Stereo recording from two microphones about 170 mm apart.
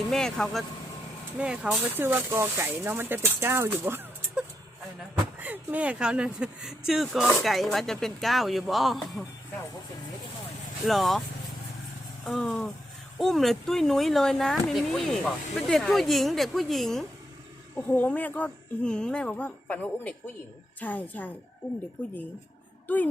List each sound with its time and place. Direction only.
0.1 s speech: 5° left (ahead or behind)
10.8 s speech: centre (ahead or behind)
12.2 s speech: centre (ahead or behind)